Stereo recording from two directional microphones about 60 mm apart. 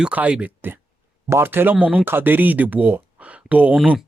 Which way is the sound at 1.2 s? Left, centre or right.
Right.